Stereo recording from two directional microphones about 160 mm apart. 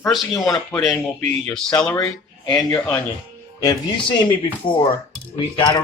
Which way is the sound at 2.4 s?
20° left (ahead or behind).